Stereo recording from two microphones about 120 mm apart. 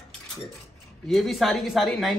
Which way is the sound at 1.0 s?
Centre (ahead or behind).